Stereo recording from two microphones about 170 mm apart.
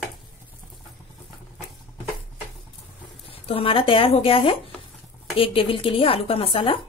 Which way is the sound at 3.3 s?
35° left (ahead or behind).